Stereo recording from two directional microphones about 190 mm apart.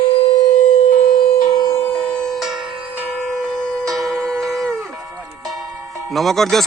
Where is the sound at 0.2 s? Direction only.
35° left (ahead or behind).